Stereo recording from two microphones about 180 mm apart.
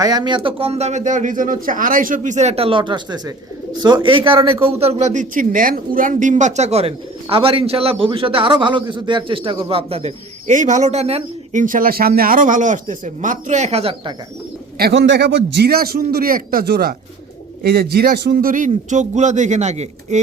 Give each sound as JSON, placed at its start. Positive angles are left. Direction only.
{"t": 0.0, "sound": "a man's voice", "side_deg": -20}
{"t": 14.8, "sound": "a man's voice", "side_deg": -70}